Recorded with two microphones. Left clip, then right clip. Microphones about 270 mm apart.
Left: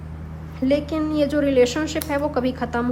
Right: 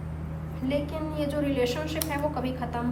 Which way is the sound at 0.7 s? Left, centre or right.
Left.